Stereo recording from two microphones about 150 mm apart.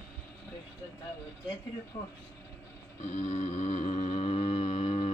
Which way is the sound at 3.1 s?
55° left (ahead or behind).